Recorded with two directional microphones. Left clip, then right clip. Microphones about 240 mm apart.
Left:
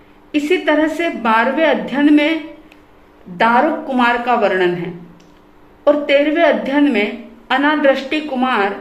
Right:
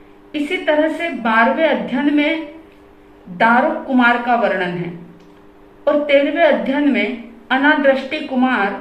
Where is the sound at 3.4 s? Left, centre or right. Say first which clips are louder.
Left 1 dB; left.